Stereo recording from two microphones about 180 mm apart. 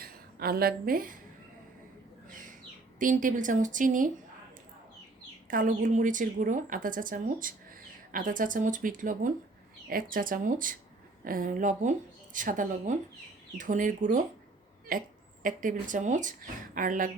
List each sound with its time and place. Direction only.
0.0 s a woman's voice: 55° right (ahead or behind)
3.0 s a woman's voice: 50° right (ahead or behind)
5.5 s a woman's voice: 45° right (ahead or behind)